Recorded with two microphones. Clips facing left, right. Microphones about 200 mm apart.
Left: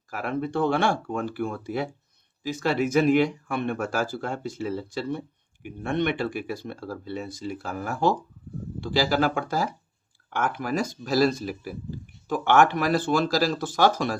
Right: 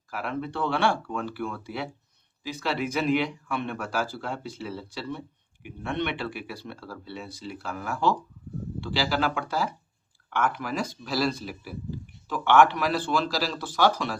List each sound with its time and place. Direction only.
0.1 s speech: 45° left (ahead or behind)